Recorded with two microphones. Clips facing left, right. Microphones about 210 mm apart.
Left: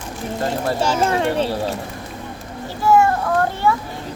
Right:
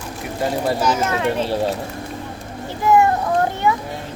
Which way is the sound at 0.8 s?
30° left (ahead or behind).